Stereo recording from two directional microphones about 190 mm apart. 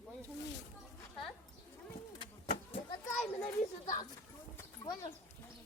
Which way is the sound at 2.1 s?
25° left (ahead or behind).